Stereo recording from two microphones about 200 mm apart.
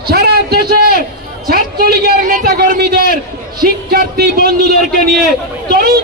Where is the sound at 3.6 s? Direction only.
45° right (ahead or behind).